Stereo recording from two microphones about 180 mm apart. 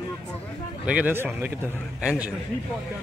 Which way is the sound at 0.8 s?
10° right (ahead or behind).